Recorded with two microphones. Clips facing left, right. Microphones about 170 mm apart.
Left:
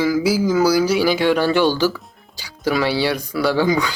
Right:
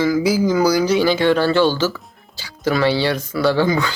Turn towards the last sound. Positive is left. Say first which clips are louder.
# right 1 dB
turn(degrees=10)  # may be behind; listen again after turning